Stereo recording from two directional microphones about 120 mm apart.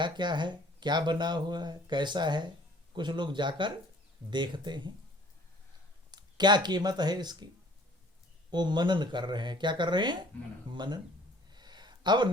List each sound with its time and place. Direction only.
0.0 s speech: 40° right (ahead or behind)
6.1 s speech: 35° right (ahead or behind)
8.4 s speech: 40° right (ahead or behind)
11.5 s a sound: 35° right (ahead or behind)